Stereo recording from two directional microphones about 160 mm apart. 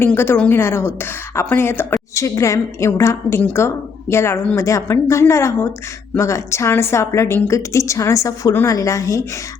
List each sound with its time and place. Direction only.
0.0 s a woman's voice: 15° left (ahead or behind)